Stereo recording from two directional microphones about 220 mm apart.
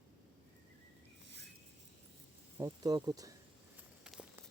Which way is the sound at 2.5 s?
15° right (ahead or behind).